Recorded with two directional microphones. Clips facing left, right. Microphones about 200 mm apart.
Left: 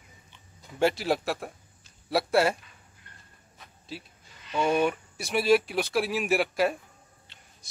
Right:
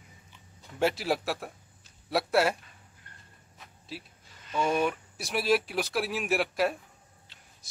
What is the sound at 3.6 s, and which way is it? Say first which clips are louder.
Insect: left 1 dB; centre (ahead or behind).